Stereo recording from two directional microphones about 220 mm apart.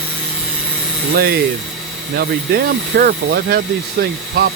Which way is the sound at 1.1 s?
45° right (ahead or behind).